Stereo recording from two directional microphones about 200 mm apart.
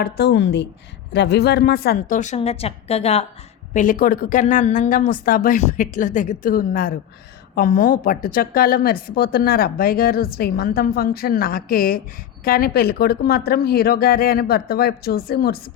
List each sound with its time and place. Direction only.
0.0 s a woman's voice: 60° left (ahead or behind)